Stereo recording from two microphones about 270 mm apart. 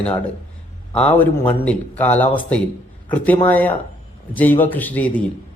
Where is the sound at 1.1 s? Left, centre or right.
Centre.